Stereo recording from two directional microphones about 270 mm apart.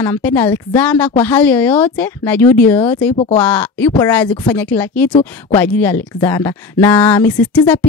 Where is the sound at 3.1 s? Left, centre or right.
Left.